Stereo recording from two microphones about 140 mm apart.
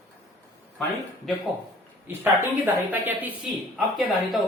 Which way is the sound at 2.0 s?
15° right (ahead or behind).